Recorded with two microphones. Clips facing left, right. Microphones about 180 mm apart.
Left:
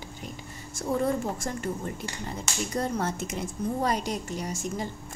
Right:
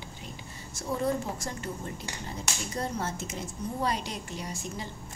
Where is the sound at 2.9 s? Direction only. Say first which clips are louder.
Left 4 dB; 55° left (ahead or behind).